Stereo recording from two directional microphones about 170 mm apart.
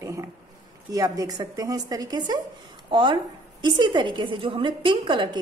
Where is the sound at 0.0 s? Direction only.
15° right (ahead or behind).